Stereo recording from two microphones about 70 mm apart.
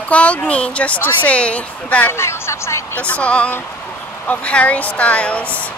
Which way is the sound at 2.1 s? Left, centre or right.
Left.